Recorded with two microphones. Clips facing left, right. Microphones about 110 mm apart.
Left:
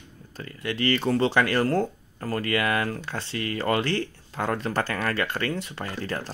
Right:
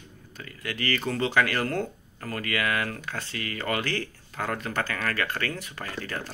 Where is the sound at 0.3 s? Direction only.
30° left (ahead or behind).